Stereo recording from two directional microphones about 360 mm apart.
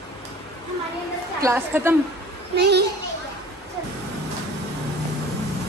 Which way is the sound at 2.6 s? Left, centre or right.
Right.